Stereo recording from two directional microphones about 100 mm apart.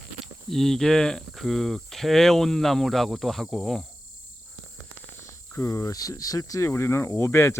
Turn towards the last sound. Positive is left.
turn(degrees=25)  # may be behind; listen again after turning